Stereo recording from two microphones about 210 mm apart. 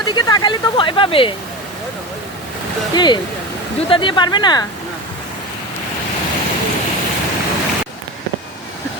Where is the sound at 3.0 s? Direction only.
20° left (ahead or behind).